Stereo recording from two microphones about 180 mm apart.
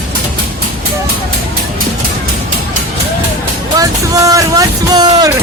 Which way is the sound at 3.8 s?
20° right (ahead or behind).